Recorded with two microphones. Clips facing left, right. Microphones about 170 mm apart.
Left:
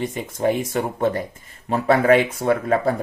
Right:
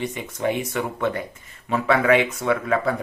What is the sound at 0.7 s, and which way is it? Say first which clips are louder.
Speech: left 3 dB; 35° left (ahead or behind).